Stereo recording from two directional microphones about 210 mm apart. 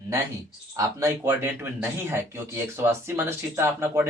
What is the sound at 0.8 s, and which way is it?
Speech, 15° right (ahead or behind).